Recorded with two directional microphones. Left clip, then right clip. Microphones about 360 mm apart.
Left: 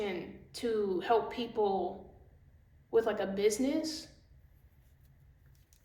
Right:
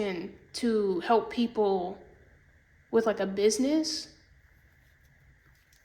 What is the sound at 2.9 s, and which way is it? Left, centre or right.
Speech, centre.